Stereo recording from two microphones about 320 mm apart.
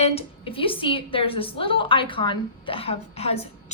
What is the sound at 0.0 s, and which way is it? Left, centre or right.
A woman's voice, centre.